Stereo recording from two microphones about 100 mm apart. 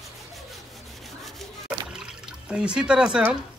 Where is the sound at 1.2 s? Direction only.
Centre (ahead or behind).